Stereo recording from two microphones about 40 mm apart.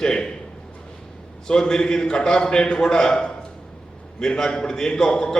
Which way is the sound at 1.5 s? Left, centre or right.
Centre.